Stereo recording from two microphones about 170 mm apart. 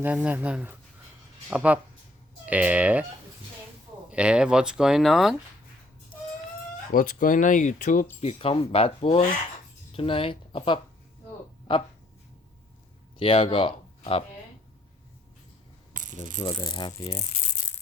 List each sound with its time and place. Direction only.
0.0 s speech: 10° right (ahead or behind)
4.1 s speech: 5° right (ahead or behind)
6.9 s speech: 50° left (ahead or behind)
8.2 s speech: 35° left (ahead or behind)
13.1 s speech: 30° left (ahead or behind)
15.9 s rattle: 50° right (ahead or behind)
16.4 s speech: 30° left (ahead or behind)